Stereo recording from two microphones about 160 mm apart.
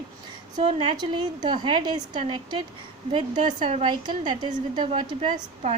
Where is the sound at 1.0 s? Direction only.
25° right (ahead or behind).